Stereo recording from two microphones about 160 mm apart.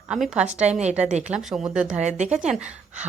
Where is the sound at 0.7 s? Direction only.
45° right (ahead or behind).